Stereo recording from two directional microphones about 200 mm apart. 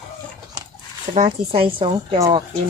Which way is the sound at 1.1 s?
40° right (ahead or behind).